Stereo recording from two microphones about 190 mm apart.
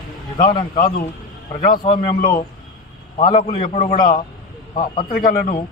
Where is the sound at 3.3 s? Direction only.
25° left (ahead or behind).